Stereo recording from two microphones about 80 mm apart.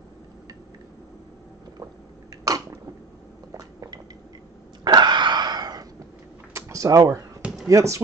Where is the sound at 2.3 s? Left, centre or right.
Right.